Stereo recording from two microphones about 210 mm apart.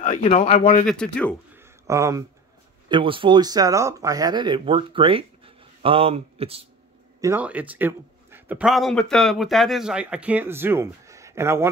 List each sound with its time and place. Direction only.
0.0 s a man's voice: 35° left (ahead or behind)
0.6 s speech: 40° left (ahead or behind)
0.8 s speech: 5° left (ahead or behind)
1.6 s a sound: 15° right (ahead or behind)
2.9 s speech: 25° right (ahead or behind)
7.2 s speech: 10° right (ahead or behind)